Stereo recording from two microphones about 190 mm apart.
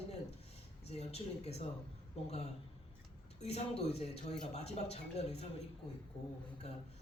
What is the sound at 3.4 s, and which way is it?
A woman's voice, 35° left (ahead or behind).